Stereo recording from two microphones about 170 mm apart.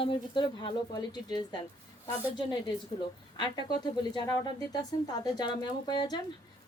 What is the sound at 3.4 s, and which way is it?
A woman's voice, 25° left (ahead or behind).